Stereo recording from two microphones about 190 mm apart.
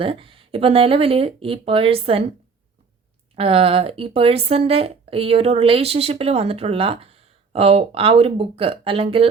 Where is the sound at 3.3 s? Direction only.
30° right (ahead or behind).